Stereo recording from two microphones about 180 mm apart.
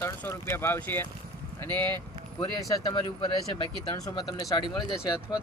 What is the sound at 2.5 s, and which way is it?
Speech, 20° left (ahead or behind).